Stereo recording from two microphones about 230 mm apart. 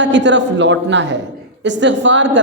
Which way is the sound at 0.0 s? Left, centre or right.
Right.